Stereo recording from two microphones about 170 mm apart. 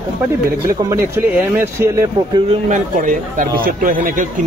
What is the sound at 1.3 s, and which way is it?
Speech, 10° right (ahead or behind).